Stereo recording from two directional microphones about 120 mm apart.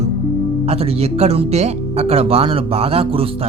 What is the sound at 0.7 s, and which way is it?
Speech, 55° right (ahead or behind).